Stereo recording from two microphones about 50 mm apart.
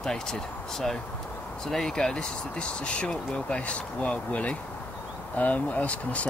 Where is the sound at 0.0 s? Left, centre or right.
Centre.